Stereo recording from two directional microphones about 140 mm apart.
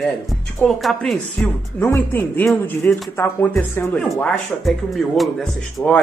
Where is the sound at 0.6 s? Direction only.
Centre (ahead or behind).